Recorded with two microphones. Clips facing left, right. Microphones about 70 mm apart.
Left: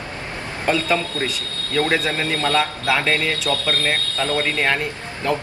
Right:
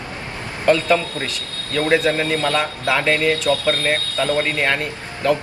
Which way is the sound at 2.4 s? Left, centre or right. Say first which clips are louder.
Even; centre.